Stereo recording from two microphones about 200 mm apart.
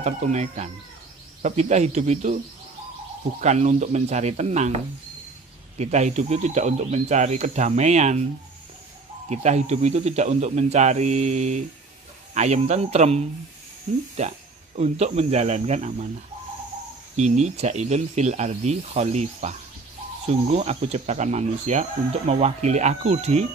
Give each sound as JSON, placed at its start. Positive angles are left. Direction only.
{"t": 0.0, "sound": "speech", "side_deg": -35}
{"t": 3.3, "sound": "speech", "side_deg": -35}
{"t": 9.3, "sound": "speech", "side_deg": -35}
{"t": 17.2, "sound": "speech", "side_deg": -35}